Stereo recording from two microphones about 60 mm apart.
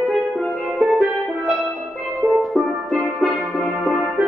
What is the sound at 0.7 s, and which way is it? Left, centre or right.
Music, centre.